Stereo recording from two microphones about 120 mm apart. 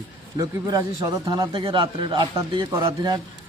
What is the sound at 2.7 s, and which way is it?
Speech, 25° right (ahead or behind).